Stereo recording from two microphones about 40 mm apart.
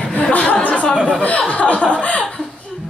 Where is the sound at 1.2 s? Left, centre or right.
Left.